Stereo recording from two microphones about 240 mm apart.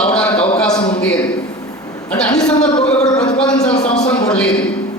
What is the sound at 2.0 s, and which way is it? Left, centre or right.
A woman's voice, centre.